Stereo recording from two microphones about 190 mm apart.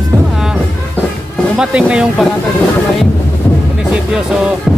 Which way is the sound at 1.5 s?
5° right (ahead or behind).